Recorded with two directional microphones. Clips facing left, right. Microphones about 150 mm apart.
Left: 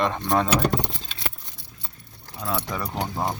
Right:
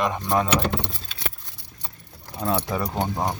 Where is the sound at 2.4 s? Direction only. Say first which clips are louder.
Right 4 dB; 25° right (ahead or behind).